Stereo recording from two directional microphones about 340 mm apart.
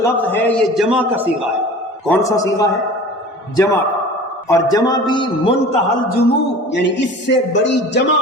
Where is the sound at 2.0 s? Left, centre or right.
Centre.